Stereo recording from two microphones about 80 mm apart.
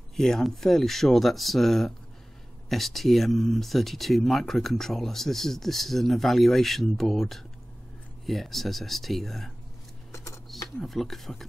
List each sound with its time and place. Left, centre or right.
0.1 s speech: centre
10.1 s a sound: left
10.8 s speech: centre